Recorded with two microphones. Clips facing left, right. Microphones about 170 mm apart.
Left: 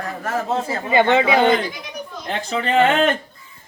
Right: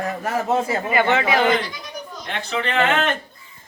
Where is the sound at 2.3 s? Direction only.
35° left (ahead or behind).